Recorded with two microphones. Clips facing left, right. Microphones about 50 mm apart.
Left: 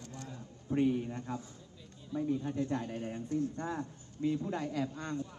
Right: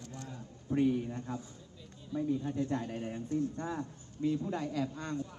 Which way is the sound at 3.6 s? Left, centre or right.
Left.